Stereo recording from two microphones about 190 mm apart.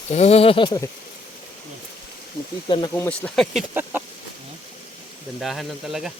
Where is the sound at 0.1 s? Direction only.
35° left (ahead or behind).